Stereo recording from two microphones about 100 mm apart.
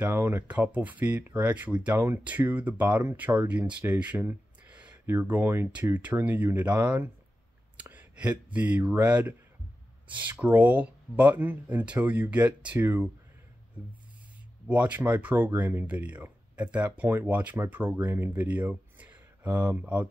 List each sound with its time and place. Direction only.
0.0 s speech: 20° right (ahead or behind)
4.2 s a sound: 20° right (ahead or behind)
5.0 s speech: 20° right (ahead or behind)
14.7 s speech: 15° right (ahead or behind)